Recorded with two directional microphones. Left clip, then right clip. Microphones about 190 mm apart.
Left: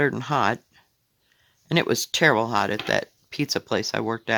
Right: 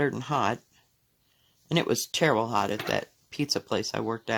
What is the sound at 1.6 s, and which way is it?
Speech, 20° left (ahead or behind).